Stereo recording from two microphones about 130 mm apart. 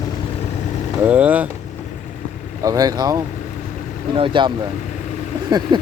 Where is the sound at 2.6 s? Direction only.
30° right (ahead or behind).